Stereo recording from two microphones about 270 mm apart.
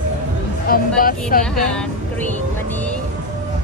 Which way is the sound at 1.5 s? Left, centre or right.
Centre.